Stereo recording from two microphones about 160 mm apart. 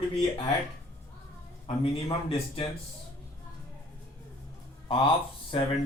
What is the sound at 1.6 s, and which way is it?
Speech, 40° left (ahead or behind).